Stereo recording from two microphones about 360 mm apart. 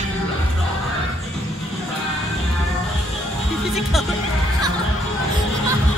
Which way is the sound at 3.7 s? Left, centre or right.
Centre.